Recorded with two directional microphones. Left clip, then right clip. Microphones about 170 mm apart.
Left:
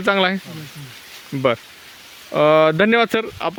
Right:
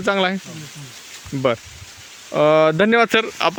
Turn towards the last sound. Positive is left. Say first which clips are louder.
# right 4 dB
turn(degrees=-5)  # may be behind; listen again after turning